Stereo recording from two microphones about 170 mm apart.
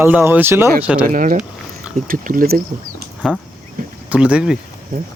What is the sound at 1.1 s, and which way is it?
Speech, 55° right (ahead or behind).